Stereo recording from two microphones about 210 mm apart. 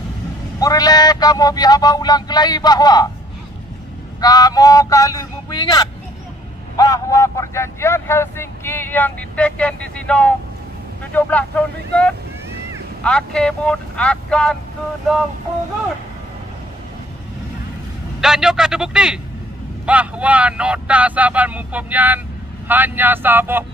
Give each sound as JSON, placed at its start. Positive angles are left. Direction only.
{"t": 0.6, "sound": "speech", "side_deg": 15}
{"t": 4.2, "sound": "speech", "side_deg": 20}
{"t": 18.2, "sound": "speech", "side_deg": 0}